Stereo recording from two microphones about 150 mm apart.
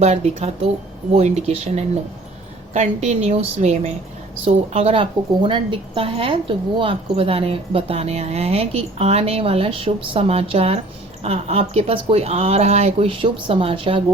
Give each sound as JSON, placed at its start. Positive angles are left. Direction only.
{"t": 0.0, "sound": "speech", "side_deg": -45}